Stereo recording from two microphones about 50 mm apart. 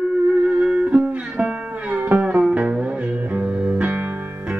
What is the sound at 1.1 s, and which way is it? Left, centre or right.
Music, right.